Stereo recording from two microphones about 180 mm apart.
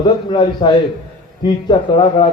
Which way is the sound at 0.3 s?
25° left (ahead or behind).